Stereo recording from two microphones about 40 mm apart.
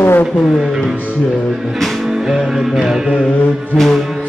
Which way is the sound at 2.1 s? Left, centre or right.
Centre.